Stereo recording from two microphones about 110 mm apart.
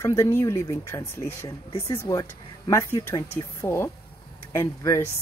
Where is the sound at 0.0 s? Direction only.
25° left (ahead or behind).